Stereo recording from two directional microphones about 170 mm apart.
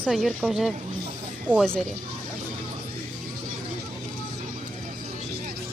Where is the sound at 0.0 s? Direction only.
Centre (ahead or behind).